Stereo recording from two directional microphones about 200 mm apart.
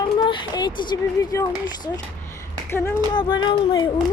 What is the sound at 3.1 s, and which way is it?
Speech, 20° left (ahead or behind).